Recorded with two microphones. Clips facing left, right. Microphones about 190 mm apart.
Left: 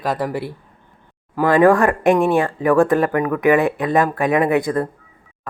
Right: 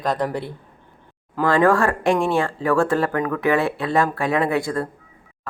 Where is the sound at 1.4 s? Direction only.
15° left (ahead or behind).